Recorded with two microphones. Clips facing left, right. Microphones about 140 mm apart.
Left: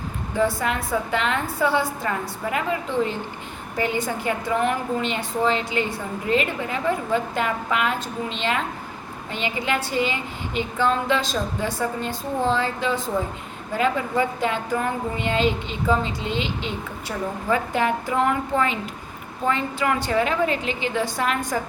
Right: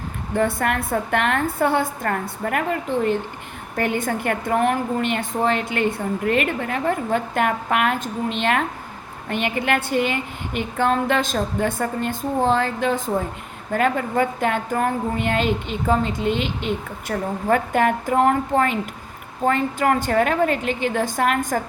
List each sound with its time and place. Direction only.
0.3 s a woman's voice: 60° right (ahead or behind)